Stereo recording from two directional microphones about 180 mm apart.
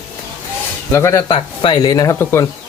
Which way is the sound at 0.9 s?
15° left (ahead or behind).